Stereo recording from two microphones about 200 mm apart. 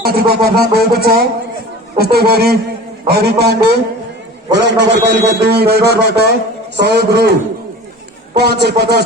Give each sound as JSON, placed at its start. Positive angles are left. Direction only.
{"t": 0.0, "sound": "a man's voice", "side_deg": -50}
{"t": 8.4, "sound": "speech", "side_deg": -55}